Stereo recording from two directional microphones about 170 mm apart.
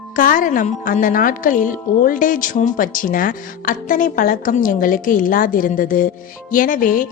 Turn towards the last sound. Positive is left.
turn(degrees=55)  # may be behind; listen again after turning